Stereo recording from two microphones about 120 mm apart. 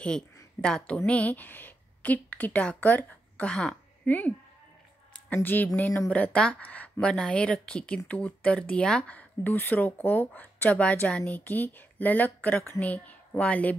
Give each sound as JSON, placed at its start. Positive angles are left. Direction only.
{"t": 0.0, "sound": "speech", "side_deg": 5}
{"t": 5.4, "sound": "speech", "side_deg": 15}